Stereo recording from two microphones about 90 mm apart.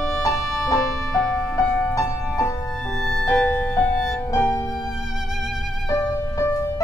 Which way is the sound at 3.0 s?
5° left (ahead or behind).